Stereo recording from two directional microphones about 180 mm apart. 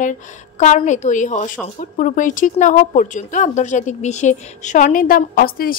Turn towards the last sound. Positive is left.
turn(degrees=55)  # may be behind; listen again after turning